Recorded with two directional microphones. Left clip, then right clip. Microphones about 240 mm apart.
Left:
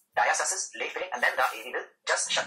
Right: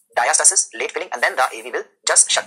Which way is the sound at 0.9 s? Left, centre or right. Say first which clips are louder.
Right 3 dB; right.